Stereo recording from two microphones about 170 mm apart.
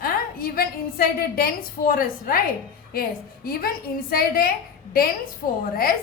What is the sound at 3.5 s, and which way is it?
A woman's voice, 60° left (ahead or behind).